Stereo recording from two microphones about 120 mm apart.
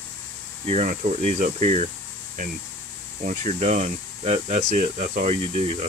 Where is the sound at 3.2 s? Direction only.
90° right.